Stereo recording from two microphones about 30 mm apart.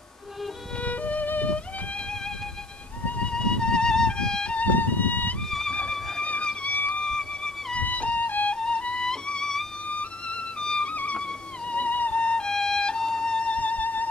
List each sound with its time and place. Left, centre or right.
0.8 s music: left
3.2 s music: left
4.7 s music: left
5.7 s music: left
6.7 s music: left
7.1 s music: left
7.8 s music: left
8.5 s music: left
9.0 s music: left
10.9 s music: left
12.2 s music: left
12.4 s music: centre; by 13.6 s left
13.6 s music: left